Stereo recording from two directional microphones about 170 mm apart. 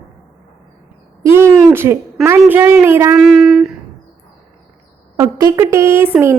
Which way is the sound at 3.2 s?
Centre (ahead or behind).